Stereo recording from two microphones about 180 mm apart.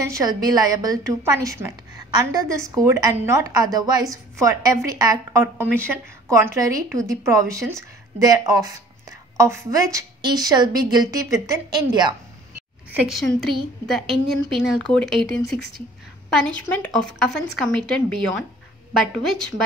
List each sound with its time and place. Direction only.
0.1 s a woman's voice: 20° right (ahead or behind)
13.0 s speech: centre (ahead or behind)
16.3 s speech: 5° left (ahead or behind)